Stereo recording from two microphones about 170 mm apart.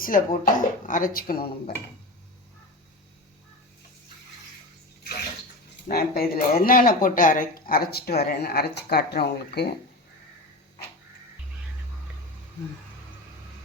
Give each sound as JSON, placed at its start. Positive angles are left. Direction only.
{"t": 0.0, "sound": "speech", "side_deg": 55}
{"t": 5.9, "sound": "speech", "side_deg": 60}